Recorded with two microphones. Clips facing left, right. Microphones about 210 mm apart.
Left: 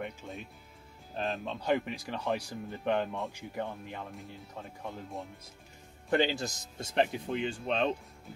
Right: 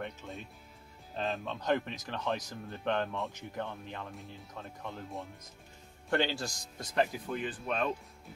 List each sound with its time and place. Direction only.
0.2 s speech: 15° left (ahead or behind)
1.1 s speech: centre (ahead or behind)
1.4 s speech: 10° left (ahead or behind)
4.8 s speech: centre (ahead or behind)
6.0 s speech: 20° left (ahead or behind)